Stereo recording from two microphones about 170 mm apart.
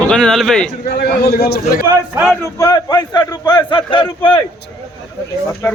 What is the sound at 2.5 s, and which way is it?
A man's voice, 25° left (ahead or behind).